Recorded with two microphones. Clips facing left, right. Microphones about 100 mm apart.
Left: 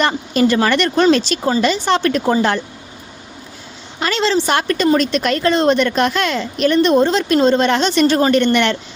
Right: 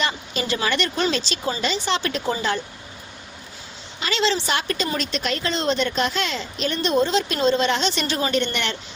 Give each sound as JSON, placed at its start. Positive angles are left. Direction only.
{"t": 0.0, "sound": "speech", "side_deg": 55}
{"t": 4.0, "sound": "speech", "side_deg": 45}